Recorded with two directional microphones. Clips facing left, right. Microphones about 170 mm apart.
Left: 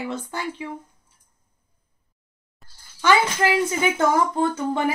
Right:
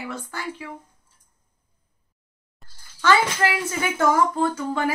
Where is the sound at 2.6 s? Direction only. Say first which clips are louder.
Even; centre (ahead or behind).